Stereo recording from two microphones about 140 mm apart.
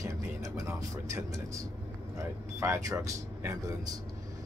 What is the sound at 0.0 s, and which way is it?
Speech, 25° right (ahead or behind).